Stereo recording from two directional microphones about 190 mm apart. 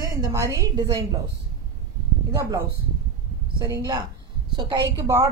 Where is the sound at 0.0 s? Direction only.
20° right (ahead or behind).